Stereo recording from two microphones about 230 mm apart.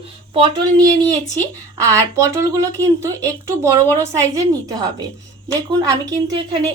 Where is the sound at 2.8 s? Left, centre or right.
Centre.